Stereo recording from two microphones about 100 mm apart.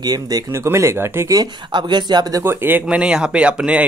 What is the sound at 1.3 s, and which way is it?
Speech, 45° right (ahead or behind).